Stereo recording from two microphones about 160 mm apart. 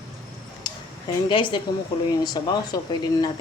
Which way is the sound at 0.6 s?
30° left (ahead or behind).